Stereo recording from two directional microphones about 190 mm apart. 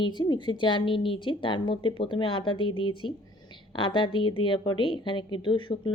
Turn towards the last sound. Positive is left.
turn(degrees=25)  # may be behind; listen again after turning